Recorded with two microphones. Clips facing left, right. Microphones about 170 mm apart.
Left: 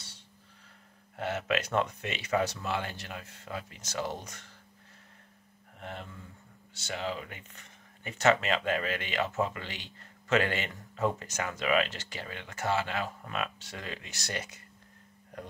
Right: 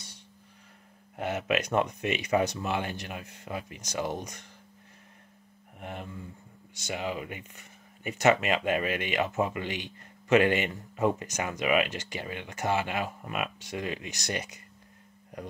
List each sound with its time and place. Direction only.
1.1 s speech: 15° right (ahead or behind)
5.8 s speech: 15° right (ahead or behind)